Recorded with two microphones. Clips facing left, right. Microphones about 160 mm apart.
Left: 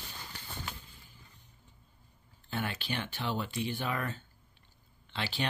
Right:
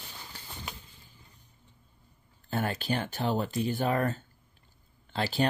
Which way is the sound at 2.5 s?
40° right (ahead or behind).